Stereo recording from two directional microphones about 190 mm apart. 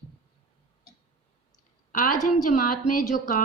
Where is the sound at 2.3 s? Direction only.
40° left (ahead or behind).